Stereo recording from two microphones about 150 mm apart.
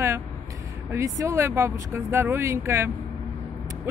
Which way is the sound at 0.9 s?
20° right (ahead or behind).